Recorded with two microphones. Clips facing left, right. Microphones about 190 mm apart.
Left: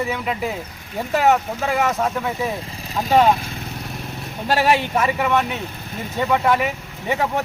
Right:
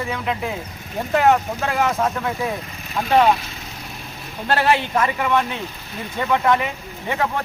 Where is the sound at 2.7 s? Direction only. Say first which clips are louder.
Left 1 dB; 35° left (ahead or behind).